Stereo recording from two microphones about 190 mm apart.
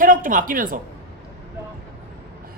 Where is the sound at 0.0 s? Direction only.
45° right (ahead or behind).